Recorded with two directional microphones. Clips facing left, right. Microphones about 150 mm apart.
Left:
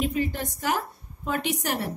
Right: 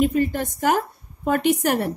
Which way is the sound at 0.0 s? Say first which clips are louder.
Right 7 dB; 50° right (ahead or behind).